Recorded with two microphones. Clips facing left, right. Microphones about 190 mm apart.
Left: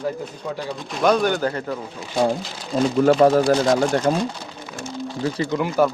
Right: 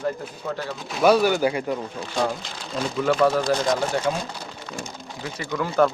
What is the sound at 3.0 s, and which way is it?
Speech, 40° left (ahead or behind).